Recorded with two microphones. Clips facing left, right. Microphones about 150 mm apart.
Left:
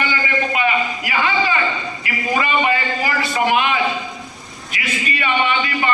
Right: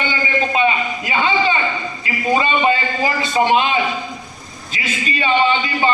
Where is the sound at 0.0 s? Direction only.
25° right (ahead or behind).